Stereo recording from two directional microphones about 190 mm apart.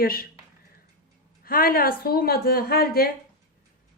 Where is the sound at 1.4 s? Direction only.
50° left (ahead or behind).